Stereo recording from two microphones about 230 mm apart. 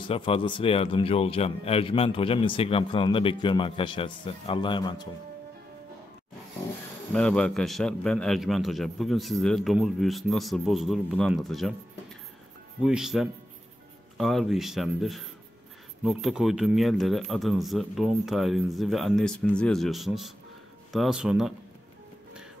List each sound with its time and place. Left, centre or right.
0.0 s speech: left
7.2 s a man's voice: centre
12.8 s a man's voice: centre